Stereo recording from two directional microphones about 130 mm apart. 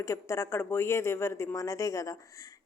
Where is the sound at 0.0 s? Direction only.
25° left (ahead or behind).